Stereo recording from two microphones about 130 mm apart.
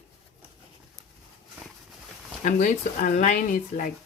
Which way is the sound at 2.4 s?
80° left.